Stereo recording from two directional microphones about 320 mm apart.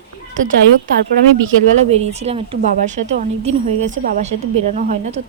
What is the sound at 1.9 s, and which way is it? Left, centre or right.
A woman's voice, centre.